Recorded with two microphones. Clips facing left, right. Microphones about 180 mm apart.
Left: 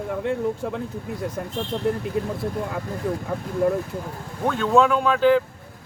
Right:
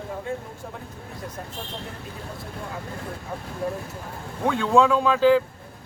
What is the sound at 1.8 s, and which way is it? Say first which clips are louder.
Speech: left 16 dB; 60° left (ahead or behind).